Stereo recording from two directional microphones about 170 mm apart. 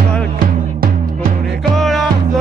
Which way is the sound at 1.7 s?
Centre (ahead or behind).